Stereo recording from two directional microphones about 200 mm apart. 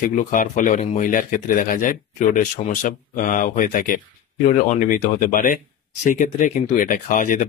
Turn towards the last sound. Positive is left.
turn(degrees=40)  # may be behind; listen again after turning